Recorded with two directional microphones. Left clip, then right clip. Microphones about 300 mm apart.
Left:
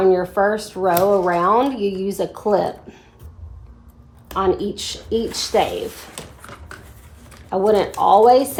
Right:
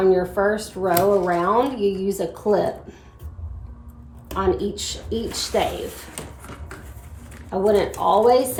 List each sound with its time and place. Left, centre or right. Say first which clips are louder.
0.0 s speech: left 2 dB; centre
4.4 s speech: left 3 dB; centre
7.5 s speech: left 2 dB; centre